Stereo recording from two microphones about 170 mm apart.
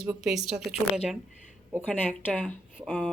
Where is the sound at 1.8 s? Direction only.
10° left (ahead or behind).